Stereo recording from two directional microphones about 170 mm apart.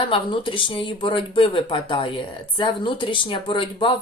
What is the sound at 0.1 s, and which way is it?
Speech, 30° left (ahead or behind).